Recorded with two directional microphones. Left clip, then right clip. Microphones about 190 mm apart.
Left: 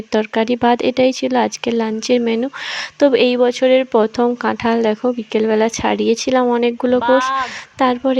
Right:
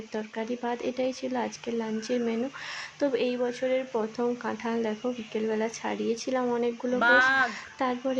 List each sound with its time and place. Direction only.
0.1 s speech: 50° left (ahead or behind)
7.0 s speech: 10° left (ahead or behind)
7.4 s speech: 45° left (ahead or behind)